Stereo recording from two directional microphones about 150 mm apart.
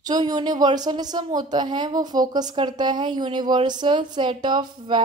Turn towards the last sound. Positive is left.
turn(degrees=-30)  # may be behind; listen again after turning